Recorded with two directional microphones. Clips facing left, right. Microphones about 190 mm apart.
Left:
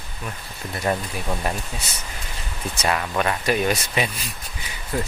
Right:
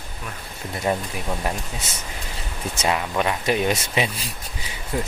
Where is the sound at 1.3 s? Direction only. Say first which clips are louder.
Even; centre (ahead or behind).